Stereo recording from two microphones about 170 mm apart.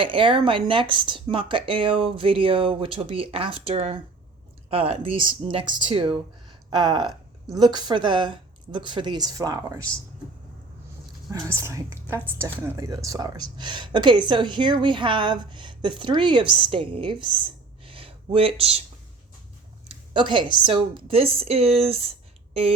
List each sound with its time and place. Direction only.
0.0 s a woman's voice: 30° right (ahead or behind)
11.3 s a woman's voice: 20° right (ahead or behind); by 18.8 s 35° right (ahead or behind)
19.9 s a sound: 25° right (ahead or behind)
20.7 s speech: 30° right (ahead or behind)